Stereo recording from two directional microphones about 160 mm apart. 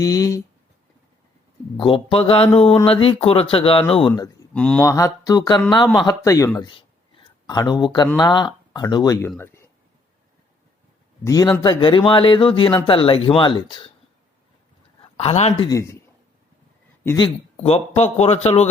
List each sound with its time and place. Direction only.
0.0 s speech: 20° left (ahead or behind)
1.7 s speech: 30° left (ahead or behind)
4.5 s speech: 5° left (ahead or behind)
4.8 s speech: 20° left (ahead or behind)
9.4 s a sound: 15° left (ahead or behind)
11.2 s speech: 20° left (ahead or behind)
15.2 s speech: 40° left (ahead or behind)
15.6 s a man's voice: 20° left (ahead or behind)
17.2 s speech: 35° left (ahead or behind)